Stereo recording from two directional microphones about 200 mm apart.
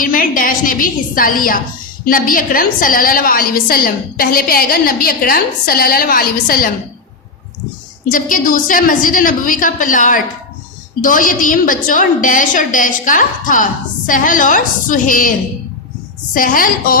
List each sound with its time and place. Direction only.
0.0 s a woman's voice: 45° left (ahead or behind)
8.0 s a woman's voice: 40° left (ahead or behind)
16.3 s a woman's voice: 45° left (ahead or behind)